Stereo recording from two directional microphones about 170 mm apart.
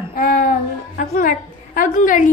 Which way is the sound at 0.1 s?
55° left (ahead or behind).